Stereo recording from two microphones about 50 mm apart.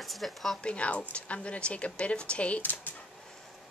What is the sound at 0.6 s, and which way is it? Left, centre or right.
Speech, left.